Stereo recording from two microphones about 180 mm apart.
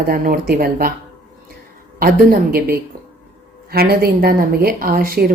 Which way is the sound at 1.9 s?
55° right (ahead or behind).